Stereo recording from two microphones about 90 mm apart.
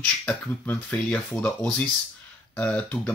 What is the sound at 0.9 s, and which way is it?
Speech, 10° left (ahead or behind).